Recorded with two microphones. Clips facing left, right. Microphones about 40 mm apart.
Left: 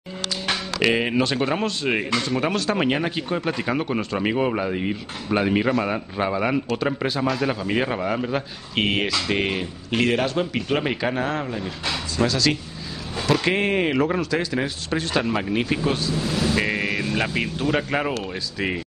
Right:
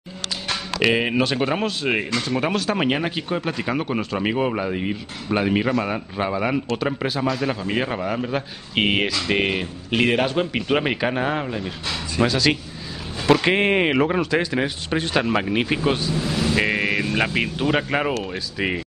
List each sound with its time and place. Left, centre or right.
0.7 s speech: centre
8.7 s a man's voice: centre
16.2 s vehicle: centre
16.5 s speech: centre